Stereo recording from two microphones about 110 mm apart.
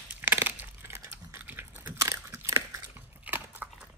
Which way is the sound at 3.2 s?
15° right (ahead or behind).